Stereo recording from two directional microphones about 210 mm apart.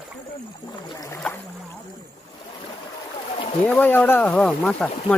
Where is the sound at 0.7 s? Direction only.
20° left (ahead or behind).